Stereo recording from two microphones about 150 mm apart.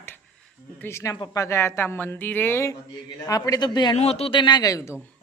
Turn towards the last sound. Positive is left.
turn(degrees=20)  # may be behind; listen again after turning